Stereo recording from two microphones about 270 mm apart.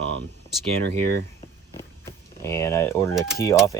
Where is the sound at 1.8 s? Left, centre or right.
Centre.